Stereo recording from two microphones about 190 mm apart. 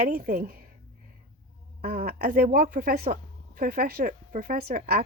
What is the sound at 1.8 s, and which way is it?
Speech, 50° right (ahead or behind).